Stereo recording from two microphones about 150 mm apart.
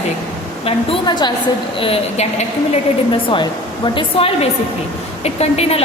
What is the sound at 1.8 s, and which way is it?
Speech, 45° left (ahead or behind).